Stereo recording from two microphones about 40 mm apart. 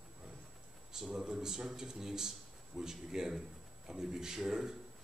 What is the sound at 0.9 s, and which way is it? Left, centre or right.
A man's voice, centre.